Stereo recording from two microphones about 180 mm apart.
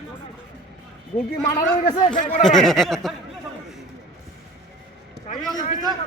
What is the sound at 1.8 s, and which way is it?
Speech, 25° left (ahead or behind).